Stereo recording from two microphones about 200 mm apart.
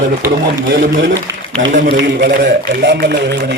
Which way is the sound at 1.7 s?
50° right (ahead or behind).